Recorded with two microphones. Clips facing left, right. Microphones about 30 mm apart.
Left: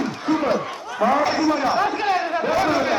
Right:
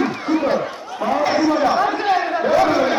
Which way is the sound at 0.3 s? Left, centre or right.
Centre.